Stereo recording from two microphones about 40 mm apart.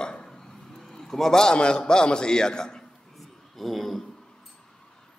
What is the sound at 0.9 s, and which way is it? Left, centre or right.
A man's voice, centre.